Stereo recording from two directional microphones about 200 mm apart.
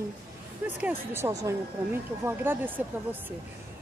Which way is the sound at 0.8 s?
10° right (ahead or behind).